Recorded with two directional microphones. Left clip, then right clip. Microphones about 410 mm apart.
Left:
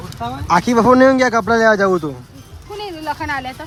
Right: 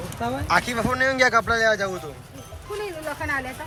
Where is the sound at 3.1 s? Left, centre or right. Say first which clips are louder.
Left 2 dB; centre.